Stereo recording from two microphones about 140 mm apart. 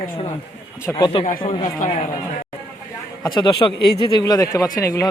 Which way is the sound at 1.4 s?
50° left (ahead or behind).